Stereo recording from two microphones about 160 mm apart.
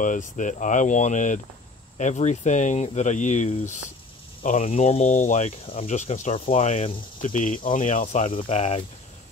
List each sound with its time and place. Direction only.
0.0 s speech: 55° left (ahead or behind)